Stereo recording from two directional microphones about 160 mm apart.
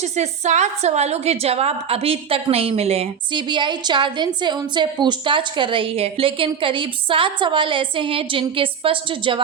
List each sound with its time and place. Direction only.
0.0 s a woman's voice: 45° right (ahead or behind)